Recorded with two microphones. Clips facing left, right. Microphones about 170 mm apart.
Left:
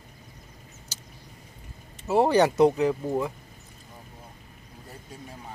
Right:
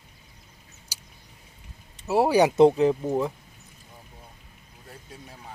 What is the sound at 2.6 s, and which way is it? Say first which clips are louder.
Speech: right 3 dB; 25° right (ahead or behind).